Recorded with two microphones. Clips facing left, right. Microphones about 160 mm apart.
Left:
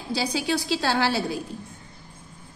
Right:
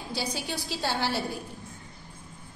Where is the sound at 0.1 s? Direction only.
90° left.